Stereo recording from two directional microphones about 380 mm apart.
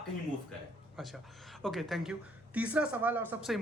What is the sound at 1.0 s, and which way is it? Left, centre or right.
Speech, centre.